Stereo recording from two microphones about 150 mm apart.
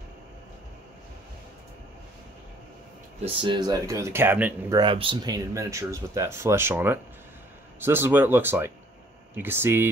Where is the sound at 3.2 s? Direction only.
30° right (ahead or behind); by 4.5 s 15° right (ahead or behind).